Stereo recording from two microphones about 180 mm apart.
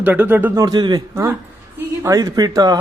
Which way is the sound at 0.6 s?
25° right (ahead or behind).